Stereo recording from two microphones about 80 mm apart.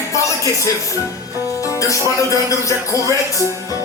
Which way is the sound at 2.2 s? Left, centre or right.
Left.